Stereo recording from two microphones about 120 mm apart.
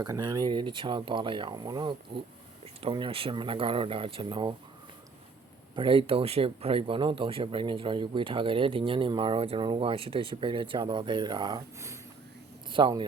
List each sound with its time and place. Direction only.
0.0 s speech: 35° right (ahead or behind)
5.7 s speech: 45° right (ahead or behind)
12.7 s speech: 40° right (ahead or behind)